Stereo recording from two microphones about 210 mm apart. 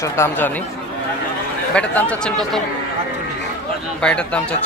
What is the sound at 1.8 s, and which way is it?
Speech, 5° left (ahead or behind).